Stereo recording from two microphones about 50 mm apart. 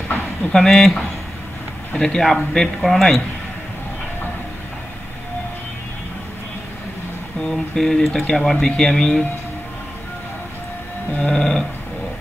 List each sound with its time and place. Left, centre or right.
0.5 s speech: centre
2.0 s speech: centre
7.5 s speech: centre
11.1 s speech: centre